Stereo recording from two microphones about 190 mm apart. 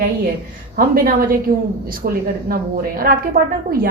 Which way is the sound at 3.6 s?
50° right (ahead or behind).